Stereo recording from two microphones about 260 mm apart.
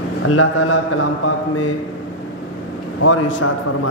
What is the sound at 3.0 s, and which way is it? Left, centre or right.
Speech, left.